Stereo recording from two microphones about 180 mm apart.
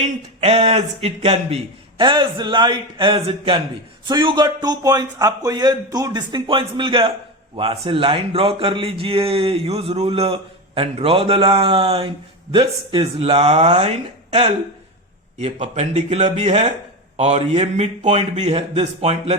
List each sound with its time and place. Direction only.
0.0 s a man's voice: 35° right (ahead or behind)
15.4 s speech: 40° right (ahead or behind)